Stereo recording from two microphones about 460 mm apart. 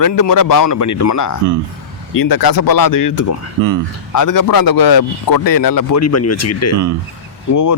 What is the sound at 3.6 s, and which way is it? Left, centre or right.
Speech, right.